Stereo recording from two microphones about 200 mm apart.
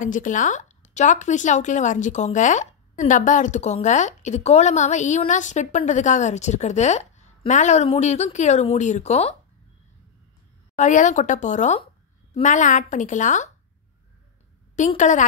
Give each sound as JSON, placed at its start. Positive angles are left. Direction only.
{"t": 0.0, "sound": "speech", "side_deg": 40}
{"t": 10.8, "sound": "speech", "side_deg": 40}
{"t": 14.8, "sound": "speech", "side_deg": 40}